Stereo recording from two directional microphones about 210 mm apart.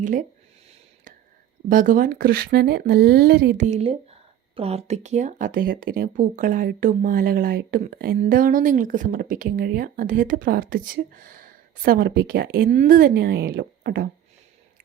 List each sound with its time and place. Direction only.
0.0 s speech: 40° right (ahead or behind)
1.7 s speech: 40° right (ahead or behind)
3.7 s speech: 30° right (ahead or behind); by 14.1 s 50° right (ahead or behind)